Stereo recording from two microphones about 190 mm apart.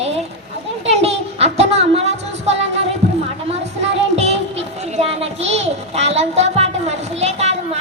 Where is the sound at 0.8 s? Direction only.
35° right (ahead or behind).